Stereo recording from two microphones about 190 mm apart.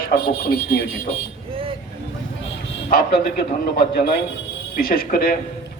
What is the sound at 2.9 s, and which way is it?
A man's voice, 50° left (ahead or behind).